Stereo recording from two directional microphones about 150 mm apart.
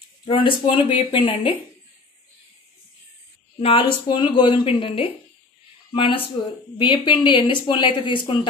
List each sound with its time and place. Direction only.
0.2 s speech: 35° left (ahead or behind)
3.5 s speech: 40° left (ahead or behind)